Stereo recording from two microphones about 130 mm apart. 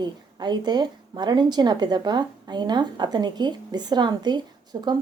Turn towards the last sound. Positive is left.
turn(degrees=-35)  # may be behind; listen again after turning